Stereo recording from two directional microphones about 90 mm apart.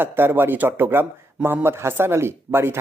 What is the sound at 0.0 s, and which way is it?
Speech, 25° right (ahead or behind).